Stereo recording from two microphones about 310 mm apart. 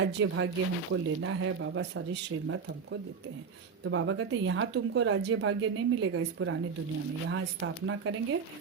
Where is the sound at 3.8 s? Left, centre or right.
Right.